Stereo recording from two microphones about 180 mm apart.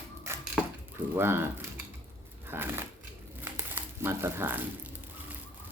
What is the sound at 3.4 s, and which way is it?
Crumpling, 15° right (ahead or behind).